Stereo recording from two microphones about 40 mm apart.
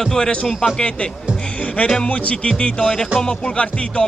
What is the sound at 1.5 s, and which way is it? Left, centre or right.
Speech, left.